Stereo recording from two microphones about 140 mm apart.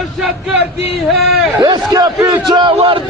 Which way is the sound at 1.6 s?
30° right (ahead or behind).